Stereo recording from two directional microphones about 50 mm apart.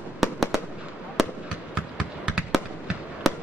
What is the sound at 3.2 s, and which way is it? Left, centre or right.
Fireworks, centre.